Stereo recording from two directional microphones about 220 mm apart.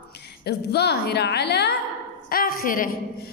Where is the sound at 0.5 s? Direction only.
50° left (ahead or behind).